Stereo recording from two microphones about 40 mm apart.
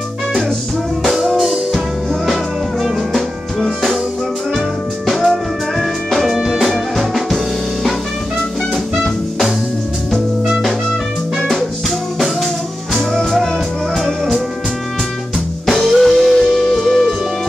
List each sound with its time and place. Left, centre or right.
1.0 s music: centre
11.3 s music: centre
13.1 s music: centre
15.6 s music: centre